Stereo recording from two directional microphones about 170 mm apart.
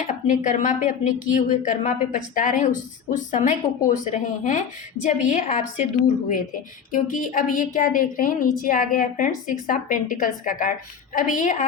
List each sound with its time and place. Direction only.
0.3 s speech: 50° left (ahead or behind)